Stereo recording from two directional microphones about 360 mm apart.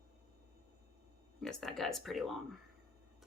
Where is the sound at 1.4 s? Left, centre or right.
Centre.